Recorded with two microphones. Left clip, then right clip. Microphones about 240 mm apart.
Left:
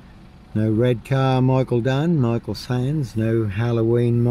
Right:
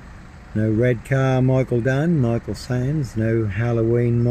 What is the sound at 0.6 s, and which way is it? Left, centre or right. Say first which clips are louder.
Speech: even; centre.